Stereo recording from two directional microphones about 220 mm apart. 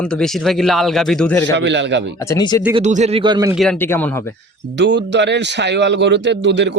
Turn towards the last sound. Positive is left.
turn(degrees=-55)  # may be behind; listen again after turning